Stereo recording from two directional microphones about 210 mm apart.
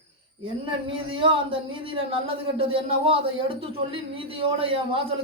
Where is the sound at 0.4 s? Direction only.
25° right (ahead or behind).